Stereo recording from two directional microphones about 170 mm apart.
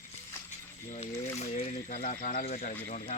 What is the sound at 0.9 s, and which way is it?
Speech, 40° left (ahead or behind).